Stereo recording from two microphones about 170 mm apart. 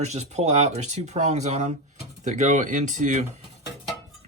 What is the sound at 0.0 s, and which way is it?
Speech, 40° right (ahead or behind).